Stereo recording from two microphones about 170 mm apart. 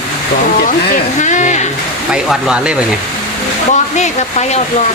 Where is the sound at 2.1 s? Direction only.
5° right (ahead or behind).